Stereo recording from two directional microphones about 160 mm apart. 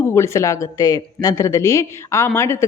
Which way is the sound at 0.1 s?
20° left (ahead or behind).